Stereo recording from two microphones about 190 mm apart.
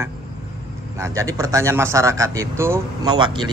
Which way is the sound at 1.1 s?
15° right (ahead or behind).